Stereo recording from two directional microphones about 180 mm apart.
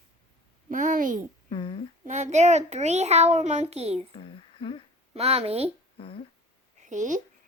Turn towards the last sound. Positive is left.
turn(degrees=-45)  # may be behind; listen again after turning